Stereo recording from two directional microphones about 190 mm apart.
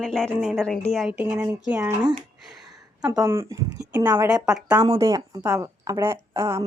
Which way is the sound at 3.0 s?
20° right (ahead or behind).